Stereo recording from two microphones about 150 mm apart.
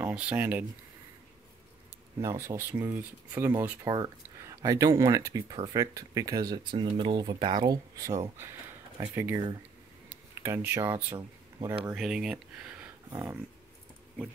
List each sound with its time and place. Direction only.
0.0 s speech: 10° right (ahead or behind)
2.1 s speech: 20° right (ahead or behind)
3.8 s speech: 25° right (ahead or behind)